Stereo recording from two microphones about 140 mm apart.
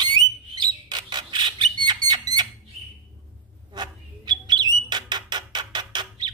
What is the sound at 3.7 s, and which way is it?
Bird, 30° right (ahead or behind).